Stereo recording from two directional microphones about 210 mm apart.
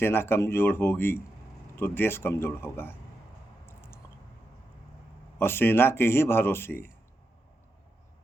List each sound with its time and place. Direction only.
0.0 s speech: 10° left (ahead or behind)
3.7 s a sound: 10° left (ahead or behind)
5.4 s speech: 10° left (ahead or behind)